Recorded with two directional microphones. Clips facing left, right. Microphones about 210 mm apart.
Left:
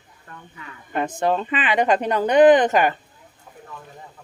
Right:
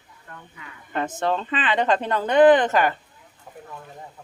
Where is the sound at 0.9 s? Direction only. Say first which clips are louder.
Left 3 dB; 15° left (ahead or behind).